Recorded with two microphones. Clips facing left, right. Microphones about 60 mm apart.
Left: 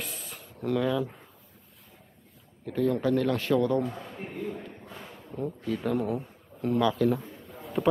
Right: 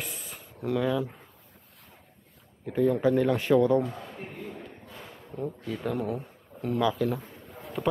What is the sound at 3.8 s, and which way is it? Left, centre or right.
A man's voice, centre.